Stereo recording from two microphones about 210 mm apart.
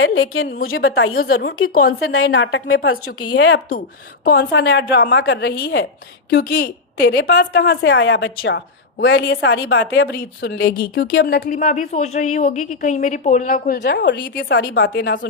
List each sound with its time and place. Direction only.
0.0 s a woman's voice: 75° left (ahead or behind)
1.2 s a woman's voice: 45° left (ahead or behind)
2.0 s a woman's voice: 65° left (ahead or behind); by 3.0 s 80° left
3.2 s speech: 90° left
4.2 s a woman's voice: 50° left (ahead or behind)
11.4 s speech: 35° left (ahead or behind)
13.7 s a woman's voice: 55° left (ahead or behind)